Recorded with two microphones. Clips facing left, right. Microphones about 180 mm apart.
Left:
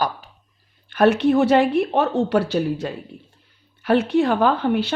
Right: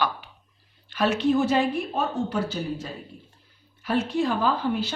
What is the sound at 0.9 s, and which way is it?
Speech, 60° left (ahead or behind).